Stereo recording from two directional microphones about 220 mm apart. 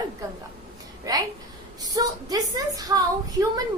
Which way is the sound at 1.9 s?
15° right (ahead or behind).